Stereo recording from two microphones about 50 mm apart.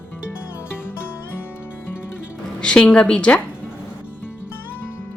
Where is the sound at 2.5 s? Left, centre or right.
Centre.